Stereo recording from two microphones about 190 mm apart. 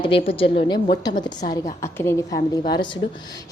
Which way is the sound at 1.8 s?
15° left (ahead or behind).